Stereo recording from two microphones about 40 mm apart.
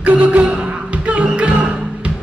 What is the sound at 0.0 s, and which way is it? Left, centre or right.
Music, right.